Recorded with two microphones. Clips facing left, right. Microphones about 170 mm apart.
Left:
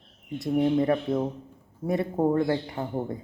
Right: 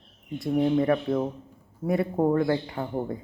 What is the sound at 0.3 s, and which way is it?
Speech, 25° left (ahead or behind).